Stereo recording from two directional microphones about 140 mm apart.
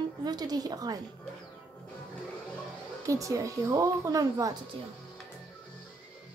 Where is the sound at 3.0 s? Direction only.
25° right (ahead or behind).